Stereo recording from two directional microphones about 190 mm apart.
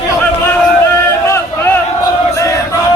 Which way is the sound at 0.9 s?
15° left (ahead or behind).